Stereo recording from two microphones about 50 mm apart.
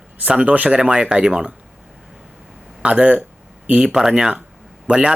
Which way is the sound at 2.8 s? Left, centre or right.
Right.